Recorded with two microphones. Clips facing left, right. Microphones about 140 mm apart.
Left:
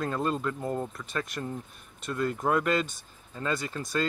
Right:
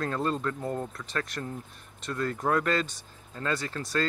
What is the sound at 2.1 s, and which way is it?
Speech, 5° left (ahead or behind).